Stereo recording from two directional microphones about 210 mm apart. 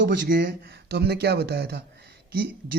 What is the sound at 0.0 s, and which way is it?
Speech, 55° right (ahead or behind).